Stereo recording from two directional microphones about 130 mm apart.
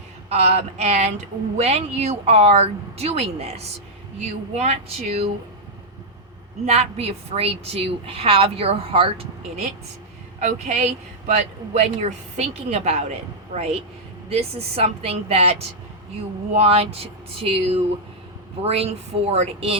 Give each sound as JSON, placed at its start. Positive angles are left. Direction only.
{"t": 0.3, "sound": "a woman's voice", "side_deg": -55}
{"t": 4.5, "sound": "a woman's voice", "side_deg": -55}
{"t": 6.7, "sound": "a woman's voice", "side_deg": -55}